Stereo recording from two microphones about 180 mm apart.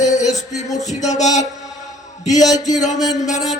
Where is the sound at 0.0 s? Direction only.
40° left (ahead or behind).